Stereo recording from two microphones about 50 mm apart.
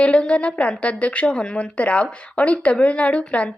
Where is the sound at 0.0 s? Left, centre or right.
Left.